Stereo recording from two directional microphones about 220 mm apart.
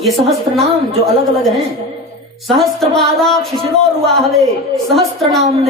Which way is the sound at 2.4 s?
Centre (ahead or behind).